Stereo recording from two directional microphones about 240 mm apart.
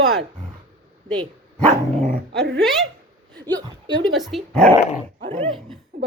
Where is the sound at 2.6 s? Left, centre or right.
Centre.